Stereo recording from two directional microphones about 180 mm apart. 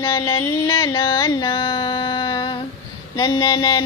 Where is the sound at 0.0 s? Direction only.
20° left (ahead or behind).